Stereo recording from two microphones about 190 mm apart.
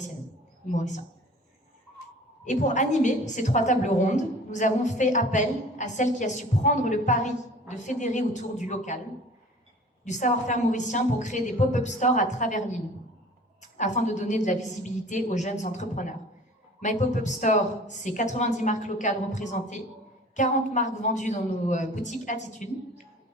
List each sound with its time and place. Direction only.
0.7 s a woman's voice: 40° left (ahead or behind)
2.4 s a woman's voice: 40° left (ahead or behind)
10.1 s a woman's voice: 40° left (ahead or behind)